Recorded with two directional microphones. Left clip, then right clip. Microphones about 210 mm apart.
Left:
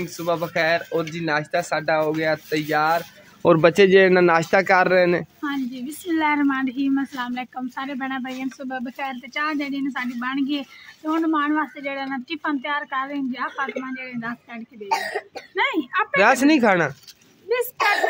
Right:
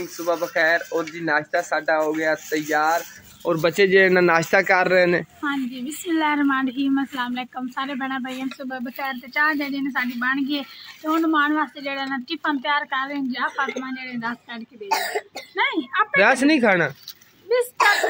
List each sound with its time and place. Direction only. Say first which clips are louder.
0.0 s speech: even; 5° left (ahead or behind)
3.4 s speech: left 6 dB; 35° left (ahead or behind)
3.7 s speech: left 1 dB; 25° left (ahead or behind); by 14.6 s 5° left (ahead or behind)
14.9 s cough: right 1 dB; 55° right (ahead or behind)
15.5 s speech: even; 35° left (ahead or behind)
16.2 s speech: left 1 dB; 10° left (ahead or behind)
17.5 s speech: right 2 dB; 35° left (ahead or behind)